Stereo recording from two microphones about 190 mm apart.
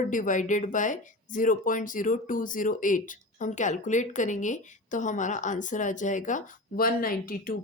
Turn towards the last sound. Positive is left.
turn(degrees=50)  # may be behind; listen again after turning